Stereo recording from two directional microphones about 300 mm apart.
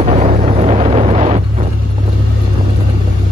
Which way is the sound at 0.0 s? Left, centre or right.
Centre.